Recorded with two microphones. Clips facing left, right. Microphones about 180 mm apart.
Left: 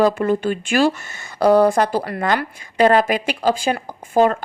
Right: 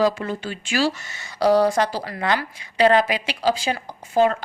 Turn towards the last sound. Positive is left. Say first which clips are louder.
# left 3 dB
turn(degrees=50)  # may be behind; listen again after turning